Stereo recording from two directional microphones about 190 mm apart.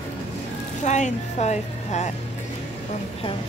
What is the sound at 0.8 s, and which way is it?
Speech, 40° left (ahead or behind).